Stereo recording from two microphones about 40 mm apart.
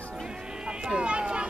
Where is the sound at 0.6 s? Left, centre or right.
Right.